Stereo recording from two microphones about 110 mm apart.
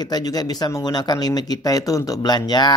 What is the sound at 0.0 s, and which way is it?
Speech, 35° left (ahead or behind).